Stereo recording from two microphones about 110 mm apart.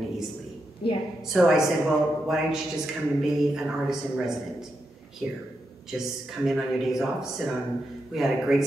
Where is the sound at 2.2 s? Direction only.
5° right (ahead or behind).